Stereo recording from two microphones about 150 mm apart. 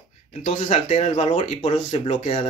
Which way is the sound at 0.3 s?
45° left (ahead or behind).